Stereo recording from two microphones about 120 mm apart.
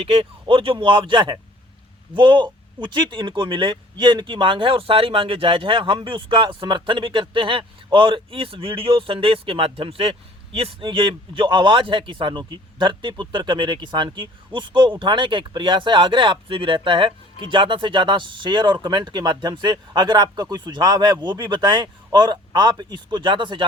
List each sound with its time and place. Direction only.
0.0 s speech: 55° right (ahead or behind)